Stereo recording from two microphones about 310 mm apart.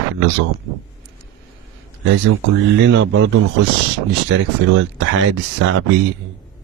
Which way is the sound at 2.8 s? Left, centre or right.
Right.